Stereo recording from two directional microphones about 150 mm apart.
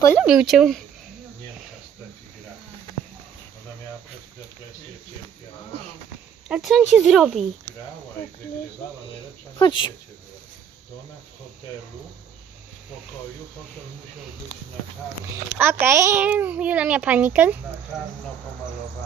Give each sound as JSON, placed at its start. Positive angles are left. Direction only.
{"t": 0.2, "sound": "speech", "side_deg": 0}
{"t": 6.5, "sound": "speech", "side_deg": 0}
{"t": 9.6, "sound": "speech", "side_deg": 30}
{"t": 15.5, "sound": "a child's voice", "side_deg": -15}